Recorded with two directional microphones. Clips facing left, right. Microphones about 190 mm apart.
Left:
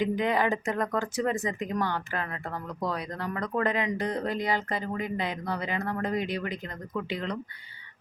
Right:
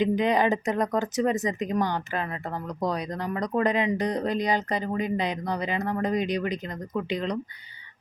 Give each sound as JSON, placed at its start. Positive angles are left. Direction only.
{"t": 0.0, "sound": "speech", "side_deg": -20}